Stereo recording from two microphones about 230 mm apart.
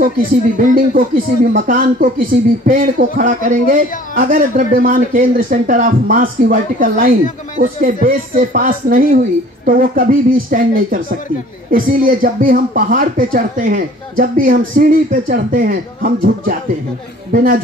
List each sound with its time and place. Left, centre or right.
0.6 s a man's voice: right